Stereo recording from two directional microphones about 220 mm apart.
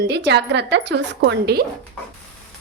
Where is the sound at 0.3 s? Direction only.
50° right (ahead or behind).